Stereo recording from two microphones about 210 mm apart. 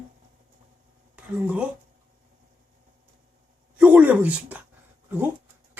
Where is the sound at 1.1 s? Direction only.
5° right (ahead or behind).